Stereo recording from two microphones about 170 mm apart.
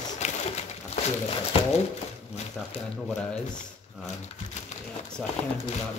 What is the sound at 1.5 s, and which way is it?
Speech, 35° left (ahead or behind).